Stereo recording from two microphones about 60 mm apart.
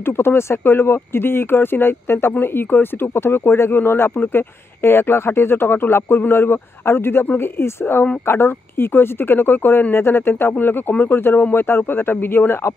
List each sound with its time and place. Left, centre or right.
0.0 s speech: left